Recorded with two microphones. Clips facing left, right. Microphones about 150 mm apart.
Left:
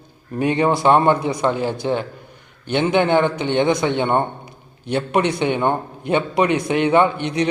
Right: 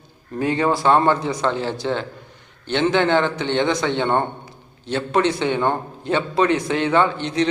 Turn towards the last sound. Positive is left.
turn(degrees=15)  # may be behind; listen again after turning